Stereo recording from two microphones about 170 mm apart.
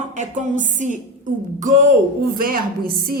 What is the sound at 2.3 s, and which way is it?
Speech, 60° right (ahead or behind).